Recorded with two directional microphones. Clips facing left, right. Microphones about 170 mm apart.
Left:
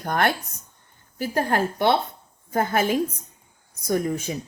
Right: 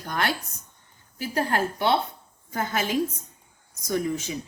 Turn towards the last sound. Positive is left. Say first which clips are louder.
# left 3 dB
turn(degrees=50)  # may be behind; listen again after turning